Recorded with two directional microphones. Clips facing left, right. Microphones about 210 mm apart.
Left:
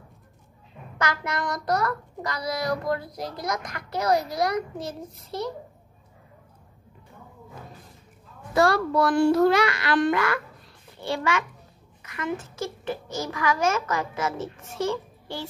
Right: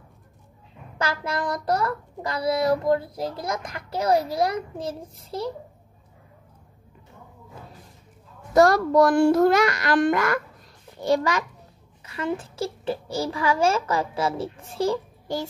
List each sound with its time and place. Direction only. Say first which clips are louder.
0.9 s a child's voice: right 1 dB; 30° right (ahead or behind)
8.5 s a child's voice: right 5 dB; 45° right (ahead or behind)